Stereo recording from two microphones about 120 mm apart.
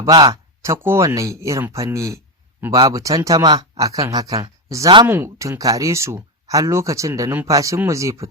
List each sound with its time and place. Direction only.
0.0 s speech: 35° right (ahead or behind)
5.0 s speech: 20° right (ahead or behind)